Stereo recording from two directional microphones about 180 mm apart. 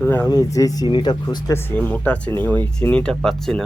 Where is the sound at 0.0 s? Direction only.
10° left (ahead or behind).